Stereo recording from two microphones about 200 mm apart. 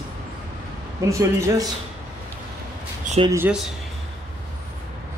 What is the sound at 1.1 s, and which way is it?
Speech, 15° right (ahead or behind).